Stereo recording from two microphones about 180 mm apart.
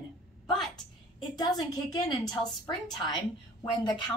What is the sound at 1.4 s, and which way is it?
Speech, 25° left (ahead or behind).